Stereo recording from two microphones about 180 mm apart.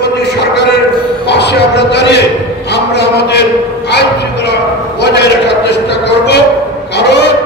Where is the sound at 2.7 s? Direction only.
70° left (ahead or behind).